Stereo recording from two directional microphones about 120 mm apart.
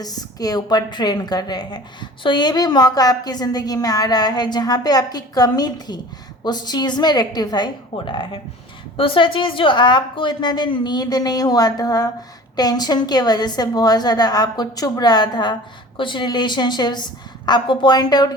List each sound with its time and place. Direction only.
0.0 s a woman's voice: 30° left (ahead or behind)